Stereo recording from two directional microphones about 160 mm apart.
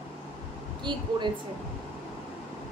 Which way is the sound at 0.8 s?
30° right (ahead or behind).